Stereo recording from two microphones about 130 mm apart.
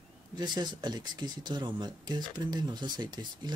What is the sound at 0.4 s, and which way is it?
Speech, 35° right (ahead or behind).